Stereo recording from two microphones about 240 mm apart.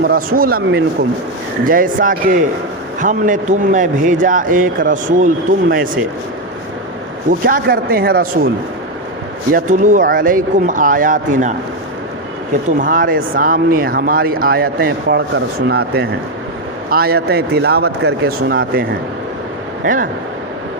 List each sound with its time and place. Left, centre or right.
0.0 s a man's voice: right
7.3 s a man's voice: right
9.5 s a man's voice: right
12.8 s a man's voice: right
16.9 s a man's voice: right